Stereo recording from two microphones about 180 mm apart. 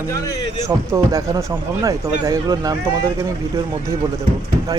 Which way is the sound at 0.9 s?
20° right (ahead or behind).